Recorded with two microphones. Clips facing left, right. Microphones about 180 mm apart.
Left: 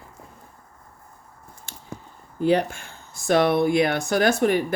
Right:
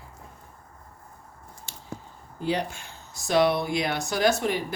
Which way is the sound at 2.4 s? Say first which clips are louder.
Left 7 dB; 55° left (ahead or behind).